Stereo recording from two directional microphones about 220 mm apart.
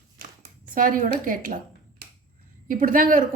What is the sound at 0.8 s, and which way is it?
A woman's voice, 35° right (ahead or behind).